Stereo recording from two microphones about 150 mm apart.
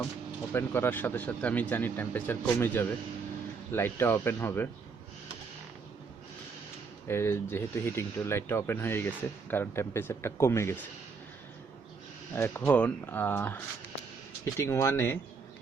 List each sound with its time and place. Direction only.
0.5 s speech: 15° left (ahead or behind)
7.1 s speech: 15° left (ahead or behind)
12.3 s speech: 15° left (ahead or behind)